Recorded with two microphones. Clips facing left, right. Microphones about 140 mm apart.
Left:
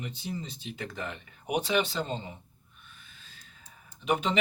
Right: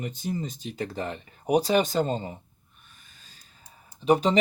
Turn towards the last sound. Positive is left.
turn(degrees=-35)  # may be behind; listen again after turning